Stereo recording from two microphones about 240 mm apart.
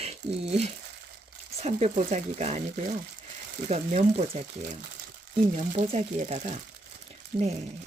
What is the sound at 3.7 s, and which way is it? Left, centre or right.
Speech, right.